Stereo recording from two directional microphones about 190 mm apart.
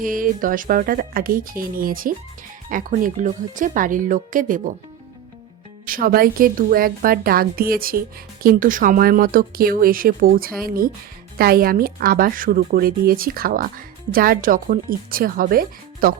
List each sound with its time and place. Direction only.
0.0 s a woman's voice: 45° right (ahead or behind)
5.8 s a woman's voice: 50° right (ahead or behind)